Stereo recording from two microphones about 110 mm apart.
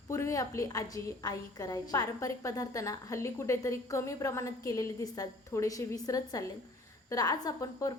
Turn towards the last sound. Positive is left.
turn(degrees=30)  # may be behind; listen again after turning